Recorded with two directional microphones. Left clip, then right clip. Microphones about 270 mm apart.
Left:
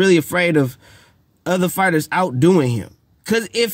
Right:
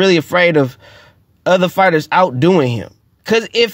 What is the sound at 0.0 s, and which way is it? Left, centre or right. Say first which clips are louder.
Speech: right 4 dB; centre.